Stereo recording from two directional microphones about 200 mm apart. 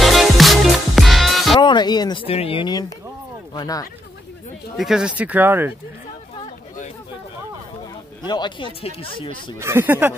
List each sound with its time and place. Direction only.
0.0 s music: centre (ahead or behind)
1.6 s speech: 20° left (ahead or behind)
4.7 s speech: centre (ahead or behind)
8.3 s speech: 20° left (ahead or behind)
9.6 s speech: 10° right (ahead or behind)